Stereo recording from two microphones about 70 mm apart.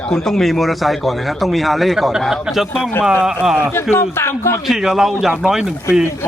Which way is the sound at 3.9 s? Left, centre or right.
Left.